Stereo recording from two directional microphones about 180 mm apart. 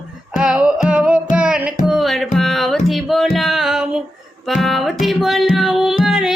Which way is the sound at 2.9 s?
Centre (ahead or behind).